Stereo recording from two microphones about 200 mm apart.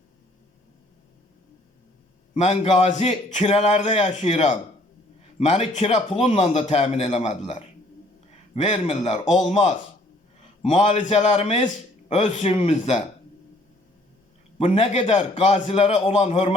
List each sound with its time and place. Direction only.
2.3 s a man's voice: 30° left (ahead or behind)
14.6 s a man's voice: 30° left (ahead or behind)